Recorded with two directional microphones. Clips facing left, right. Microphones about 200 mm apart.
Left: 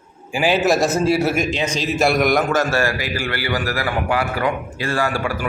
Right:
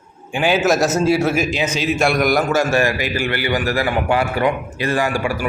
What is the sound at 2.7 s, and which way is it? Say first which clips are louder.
A man's voice: right 3 dB; 15° right (ahead or behind).